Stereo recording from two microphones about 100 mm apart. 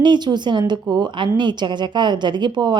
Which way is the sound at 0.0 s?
50° right (ahead or behind).